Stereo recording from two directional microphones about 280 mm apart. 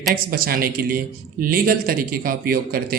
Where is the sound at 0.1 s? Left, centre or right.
Right.